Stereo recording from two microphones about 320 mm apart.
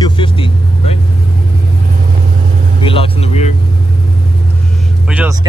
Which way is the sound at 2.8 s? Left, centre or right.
Centre.